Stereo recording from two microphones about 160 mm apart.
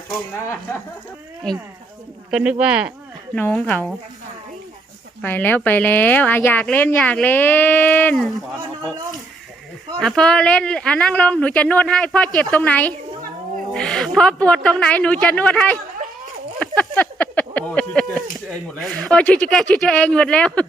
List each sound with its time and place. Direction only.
0.3 s a woman's voice: 20° left (ahead or behind)
1.5 s speech: 5° left (ahead or behind)
2.3 s speech: 5° right (ahead or behind)
3.3 s a woman's voice: 10° left (ahead or behind)
5.2 s a woman's voice: 10° left (ahead or behind)
10.0 s a woman's voice: 5° left (ahead or behind)
16.6 s a sound: 10° left (ahead or behind)
18.8 s a woman's voice: centre (ahead or behind)